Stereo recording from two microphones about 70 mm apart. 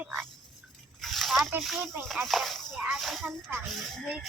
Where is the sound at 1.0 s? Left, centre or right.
Centre.